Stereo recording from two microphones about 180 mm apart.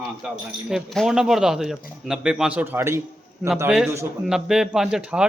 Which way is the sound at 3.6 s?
Centre (ahead or behind).